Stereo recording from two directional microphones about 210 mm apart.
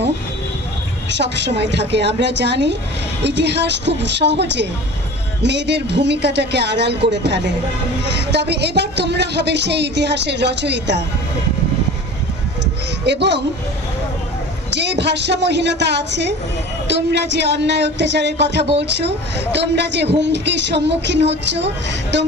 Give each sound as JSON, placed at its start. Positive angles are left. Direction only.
{"t": 1.1, "sound": "a woman's voice", "side_deg": -55}
{"t": 13.0, "sound": "a woman's voice", "side_deg": -55}
{"t": 14.7, "sound": "a woman's voice", "side_deg": -55}